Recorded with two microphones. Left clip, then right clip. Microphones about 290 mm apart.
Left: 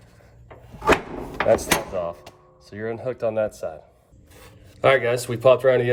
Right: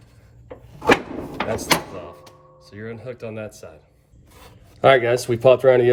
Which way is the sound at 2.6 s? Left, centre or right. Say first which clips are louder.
Left 6 dB; centre.